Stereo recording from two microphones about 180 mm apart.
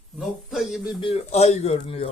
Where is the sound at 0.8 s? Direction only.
30° left (ahead or behind).